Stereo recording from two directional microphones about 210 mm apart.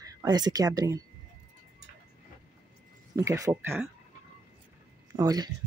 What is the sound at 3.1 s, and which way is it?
Speech, 15° right (ahead or behind).